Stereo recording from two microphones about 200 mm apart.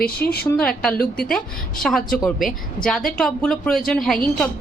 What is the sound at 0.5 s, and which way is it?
Speech, 5° left (ahead or behind).